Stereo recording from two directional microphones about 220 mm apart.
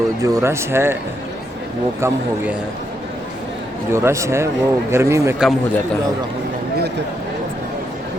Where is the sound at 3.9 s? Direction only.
10° right (ahead or behind).